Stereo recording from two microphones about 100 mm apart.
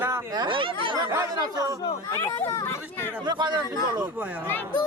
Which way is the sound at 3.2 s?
45° right (ahead or behind).